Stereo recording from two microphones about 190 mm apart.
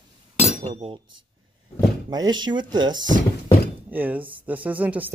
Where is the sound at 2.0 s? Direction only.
20° right (ahead or behind).